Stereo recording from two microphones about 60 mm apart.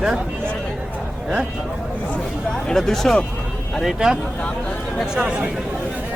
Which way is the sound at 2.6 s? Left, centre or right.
Centre.